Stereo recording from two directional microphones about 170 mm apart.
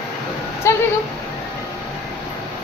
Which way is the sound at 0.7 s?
15° left (ahead or behind).